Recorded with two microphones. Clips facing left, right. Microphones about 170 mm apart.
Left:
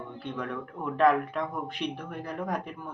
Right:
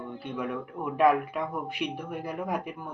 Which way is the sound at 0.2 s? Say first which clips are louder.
Right 1 dB; 10° right (ahead or behind).